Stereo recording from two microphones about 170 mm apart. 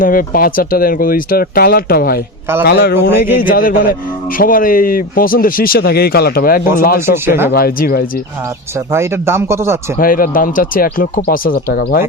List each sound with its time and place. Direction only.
0.0 s a man's voice: 55° left (ahead or behind)
3.4 s speech: 55° left (ahead or behind)
8.9 s speech: 15° right (ahead or behind)
10.0 s speech: 55° left (ahead or behind)